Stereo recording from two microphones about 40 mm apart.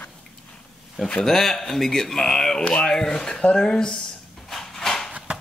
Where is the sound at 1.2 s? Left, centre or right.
Centre.